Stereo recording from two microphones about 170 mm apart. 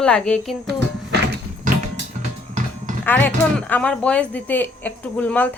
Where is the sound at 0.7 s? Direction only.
75° right (ahead or behind).